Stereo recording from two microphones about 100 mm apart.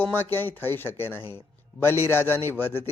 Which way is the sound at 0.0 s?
20° left (ahead or behind).